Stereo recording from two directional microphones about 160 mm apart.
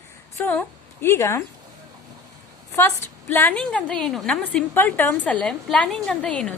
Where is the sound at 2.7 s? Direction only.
15° left (ahead or behind).